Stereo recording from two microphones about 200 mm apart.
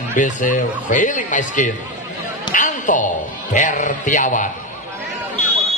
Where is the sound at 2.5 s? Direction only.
40° left (ahead or behind).